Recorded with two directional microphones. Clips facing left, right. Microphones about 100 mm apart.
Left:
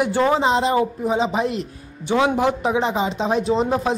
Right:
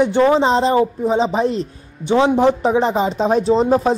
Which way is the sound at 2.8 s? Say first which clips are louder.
Right 4 dB; 40° right (ahead or behind).